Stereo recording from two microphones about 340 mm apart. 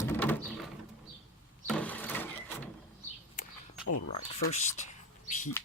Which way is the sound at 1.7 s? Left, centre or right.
Centre.